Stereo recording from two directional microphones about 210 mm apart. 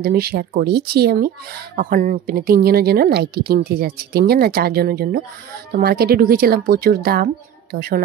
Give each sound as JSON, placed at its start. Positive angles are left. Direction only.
{"t": 0.0, "sound": "speech", "side_deg": -45}